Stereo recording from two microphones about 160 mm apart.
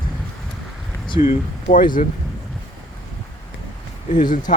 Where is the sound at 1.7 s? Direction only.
55° left (ahead or behind).